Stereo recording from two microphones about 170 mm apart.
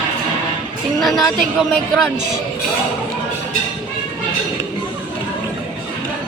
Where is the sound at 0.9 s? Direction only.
Centre (ahead or behind).